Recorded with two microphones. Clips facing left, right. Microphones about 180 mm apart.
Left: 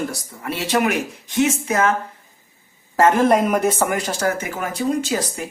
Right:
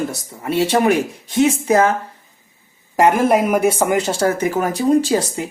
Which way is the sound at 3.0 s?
10° right (ahead or behind).